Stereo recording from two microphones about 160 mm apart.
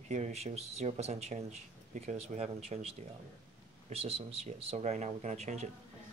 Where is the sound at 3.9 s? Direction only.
40° right (ahead or behind).